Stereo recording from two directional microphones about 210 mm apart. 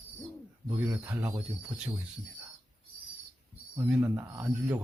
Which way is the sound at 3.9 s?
10° right (ahead or behind).